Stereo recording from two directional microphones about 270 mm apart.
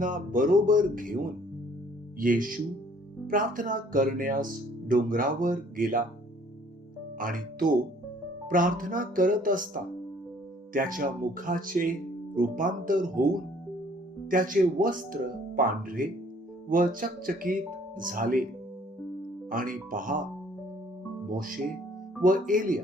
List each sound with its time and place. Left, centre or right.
0.0 s speech: right
7.2 s speech: right
14.3 s speech: right
19.5 s speech: right
21.2 s speech: right